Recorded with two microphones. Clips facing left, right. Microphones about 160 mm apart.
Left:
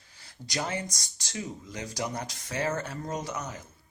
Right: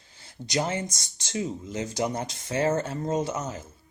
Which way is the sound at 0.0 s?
25° right (ahead or behind).